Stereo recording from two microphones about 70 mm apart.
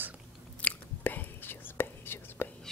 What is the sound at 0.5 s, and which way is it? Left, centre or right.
Whispering, left.